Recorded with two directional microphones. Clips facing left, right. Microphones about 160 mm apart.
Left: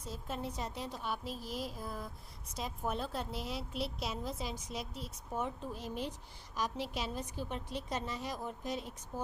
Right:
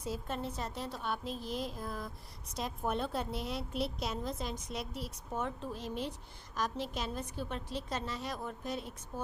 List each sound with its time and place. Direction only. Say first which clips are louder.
0.3 s a woman's voice: right 1 dB; 10° left (ahead or behind)
4.6 s a woman's voice: right 2 dB; 60° right (ahead or behind)
4.9 s a woman's voice: left 1 dB; centre (ahead or behind)